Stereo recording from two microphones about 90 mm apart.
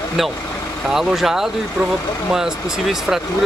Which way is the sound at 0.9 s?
5° right (ahead or behind).